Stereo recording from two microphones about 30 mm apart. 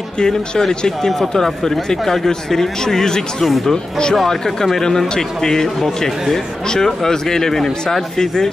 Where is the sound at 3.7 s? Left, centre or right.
Left.